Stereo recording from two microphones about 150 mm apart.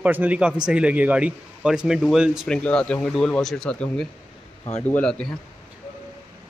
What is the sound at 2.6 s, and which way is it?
A man's voice, 5° left (ahead or behind).